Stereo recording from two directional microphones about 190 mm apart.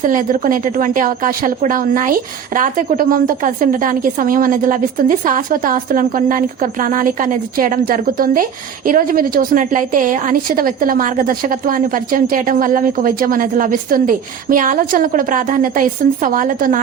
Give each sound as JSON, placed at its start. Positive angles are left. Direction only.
{"t": 0.0, "sound": "speech", "side_deg": -45}